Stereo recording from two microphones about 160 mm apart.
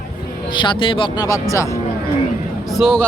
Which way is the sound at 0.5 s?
30° left (ahead or behind).